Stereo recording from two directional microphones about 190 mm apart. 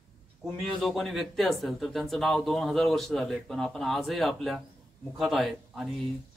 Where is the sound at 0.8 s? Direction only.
Centre (ahead or behind).